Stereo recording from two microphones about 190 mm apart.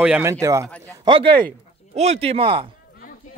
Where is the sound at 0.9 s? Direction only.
25° right (ahead or behind).